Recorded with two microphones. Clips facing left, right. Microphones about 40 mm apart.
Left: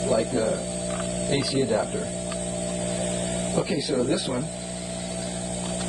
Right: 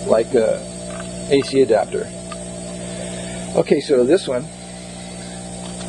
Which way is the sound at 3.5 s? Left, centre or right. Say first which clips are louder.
Right 12 dB; right.